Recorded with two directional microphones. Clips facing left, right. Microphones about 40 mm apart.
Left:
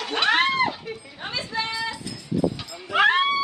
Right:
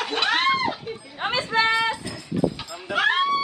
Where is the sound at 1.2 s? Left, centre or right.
Right.